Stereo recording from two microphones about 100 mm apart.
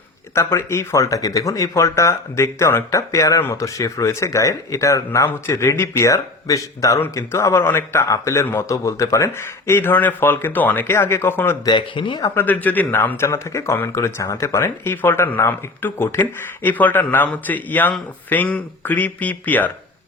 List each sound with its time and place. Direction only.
0.3 s speech: 25° left (ahead or behind)
11.6 s speech: 55° left (ahead or behind)
12.3 s speech: 20° left (ahead or behind)